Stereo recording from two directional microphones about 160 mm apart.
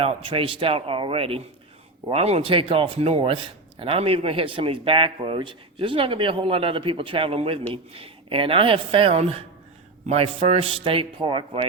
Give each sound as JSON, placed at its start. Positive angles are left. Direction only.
{"t": 0.0, "sound": "speech", "side_deg": -35}